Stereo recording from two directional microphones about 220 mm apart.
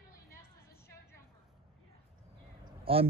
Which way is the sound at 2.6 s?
25° right (ahead or behind).